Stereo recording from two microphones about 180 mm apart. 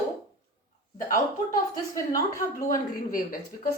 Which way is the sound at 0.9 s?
50° left (ahead or behind).